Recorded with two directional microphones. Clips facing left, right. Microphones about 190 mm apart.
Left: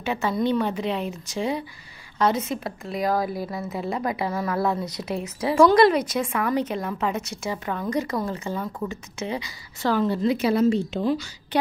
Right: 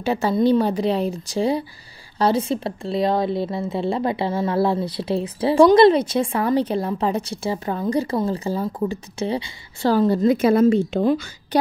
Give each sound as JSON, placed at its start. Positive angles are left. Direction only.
{"t": 0.0, "sound": "a woman's voice", "side_deg": -35}
{"t": 11.5, "sound": "speech", "side_deg": -40}